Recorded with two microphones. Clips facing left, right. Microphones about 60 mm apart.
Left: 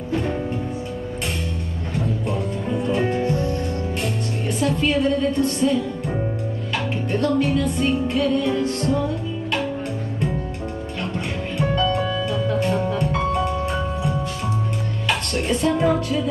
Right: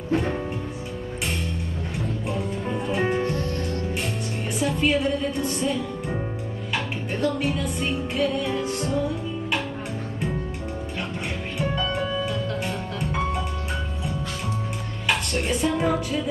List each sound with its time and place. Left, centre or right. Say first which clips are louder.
2.2 s music: left 3 dB; centre
3.3 s music: left 4 dB; left
4.6 s a woman's voice: left 2 dB; centre
7.1 s music: left 5 dB; centre
15.0 s speech: left 1 dB; centre